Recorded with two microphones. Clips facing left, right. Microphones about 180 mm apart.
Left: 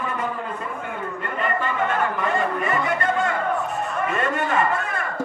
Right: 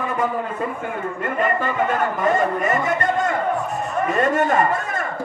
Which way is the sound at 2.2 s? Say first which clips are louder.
Right 4 dB; 40° right (ahead or behind).